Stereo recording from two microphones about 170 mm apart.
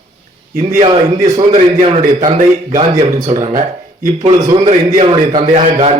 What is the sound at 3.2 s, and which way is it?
Speech, 40° right (ahead or behind).